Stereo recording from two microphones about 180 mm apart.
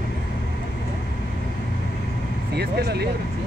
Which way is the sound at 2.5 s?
65° right (ahead or behind).